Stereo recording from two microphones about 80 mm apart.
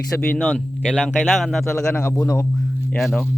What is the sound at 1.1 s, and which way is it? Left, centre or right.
Speech, centre.